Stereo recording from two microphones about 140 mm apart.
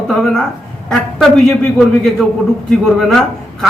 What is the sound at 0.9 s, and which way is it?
A man's voice, 5° left (ahead or behind).